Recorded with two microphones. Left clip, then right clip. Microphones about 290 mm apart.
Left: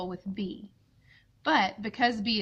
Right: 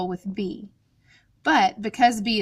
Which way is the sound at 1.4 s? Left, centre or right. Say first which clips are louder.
Right 6 dB; right.